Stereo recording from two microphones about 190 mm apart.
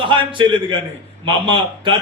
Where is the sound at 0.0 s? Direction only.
25° right (ahead or behind).